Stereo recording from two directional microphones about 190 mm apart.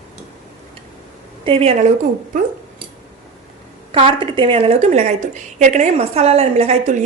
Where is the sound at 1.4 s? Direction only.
30° right (ahead or behind).